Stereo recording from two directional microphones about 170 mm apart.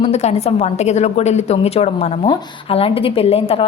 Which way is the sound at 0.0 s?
40° left (ahead or behind).